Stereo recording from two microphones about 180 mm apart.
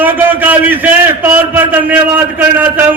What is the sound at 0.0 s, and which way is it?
A man's voice, 10° right (ahead or behind).